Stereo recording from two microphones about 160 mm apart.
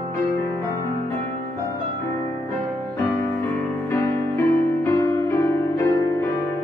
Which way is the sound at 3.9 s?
20° left (ahead or behind).